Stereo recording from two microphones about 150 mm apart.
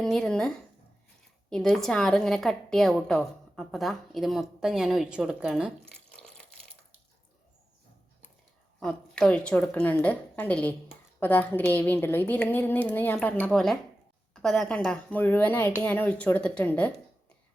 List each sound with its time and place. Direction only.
0.0 s a woman's voice: 5° left (ahead or behind)
6.1 s water tap: 5° left (ahead or behind)
8.8 s a woman's voice: 5° left (ahead or behind)